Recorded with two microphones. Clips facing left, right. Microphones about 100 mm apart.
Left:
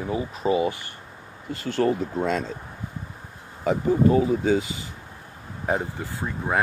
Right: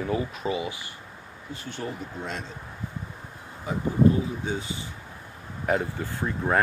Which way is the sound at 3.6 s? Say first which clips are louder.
Left 2 dB; 90° left.